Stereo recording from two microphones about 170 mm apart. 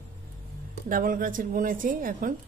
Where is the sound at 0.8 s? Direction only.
55° right (ahead or behind).